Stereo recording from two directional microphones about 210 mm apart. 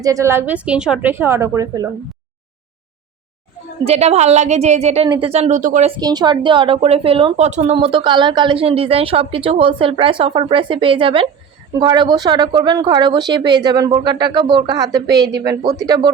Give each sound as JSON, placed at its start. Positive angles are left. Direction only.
{"t": 0.0, "sound": "a woman's voice", "side_deg": -15}
{"t": 3.8, "sound": "a woman's voice", "side_deg": -30}
{"t": 6.0, "sound": "a woman's voice", "side_deg": -20}